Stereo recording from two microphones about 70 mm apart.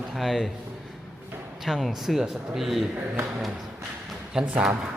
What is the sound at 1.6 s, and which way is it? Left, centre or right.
Speech, centre.